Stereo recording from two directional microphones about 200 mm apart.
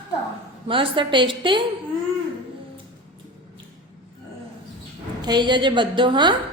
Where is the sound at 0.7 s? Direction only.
25° right (ahead or behind).